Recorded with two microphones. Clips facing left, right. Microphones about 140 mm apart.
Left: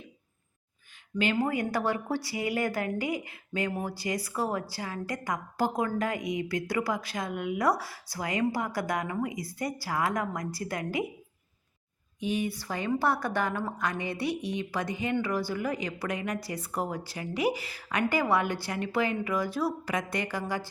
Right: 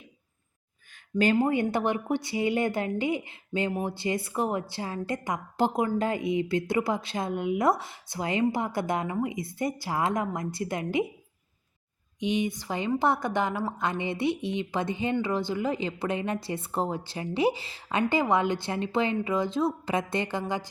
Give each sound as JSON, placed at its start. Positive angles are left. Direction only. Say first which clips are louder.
{"t": 1.1, "sound": "a woman's voice", "louder": "right 4 dB", "side_deg": -35}
{"t": 12.2, "sound": "a woman's voice", "louder": "right 3 dB", "side_deg": -20}